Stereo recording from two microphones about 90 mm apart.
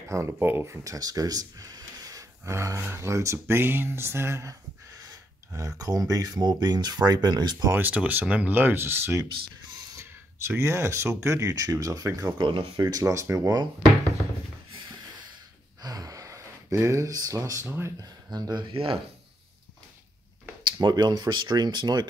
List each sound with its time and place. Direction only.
0.1 s speech: 25° right (ahead or behind)
0.9 s speech: 45° right (ahead or behind)
7.5 s speech: 35° right (ahead or behind)
7.8 s speech: 20° right (ahead or behind); by 12.4 s 40° right (ahead or behind)
12.4 s speech: 70° right (ahead or behind)
12.7 s speech: 45° right (ahead or behind)
13.0 s speech: 35° right (ahead or behind)
15.8 s speech: 45° right (ahead or behind); by 17.9 s 30° right (ahead or behind)
18.3 s speech: 50° right (ahead or behind)
18.7 s speech: 90° right
20.7 s speech: 50° right (ahead or behind)